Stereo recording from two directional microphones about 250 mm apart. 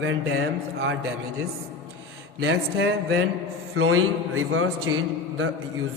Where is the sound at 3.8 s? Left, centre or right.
Right.